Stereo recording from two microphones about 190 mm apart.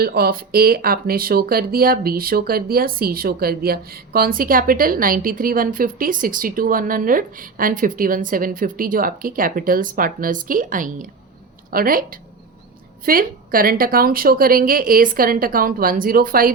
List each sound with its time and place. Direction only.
0.0 s speech: 55° right (ahead or behind)